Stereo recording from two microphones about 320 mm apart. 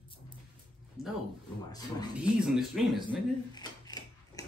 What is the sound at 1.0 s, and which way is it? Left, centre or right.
Speech, centre.